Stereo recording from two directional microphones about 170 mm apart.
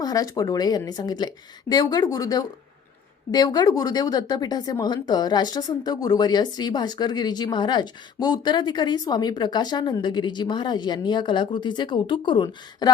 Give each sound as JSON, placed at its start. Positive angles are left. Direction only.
{"t": 0.0, "sound": "speech", "side_deg": 20}